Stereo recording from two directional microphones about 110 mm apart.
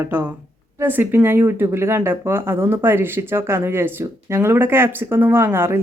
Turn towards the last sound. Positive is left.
turn(degrees=-20)  # may be behind; listen again after turning